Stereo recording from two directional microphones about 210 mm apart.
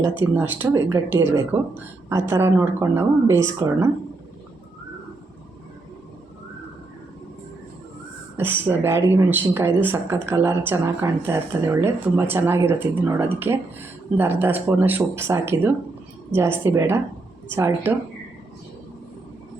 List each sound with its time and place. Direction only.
0.2 s speech: 10° right (ahead or behind)
8.4 s speech: 10° right (ahead or behind)